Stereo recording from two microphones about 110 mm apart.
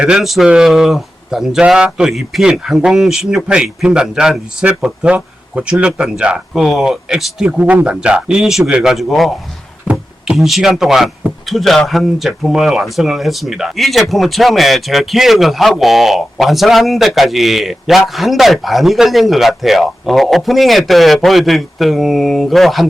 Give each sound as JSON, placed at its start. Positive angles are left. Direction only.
{"t": 0.0, "sound": "speech", "side_deg": -5}
{"t": 9.8, "sound": "a sound", "side_deg": -10}
{"t": 10.3, "sound": "speech", "side_deg": 0}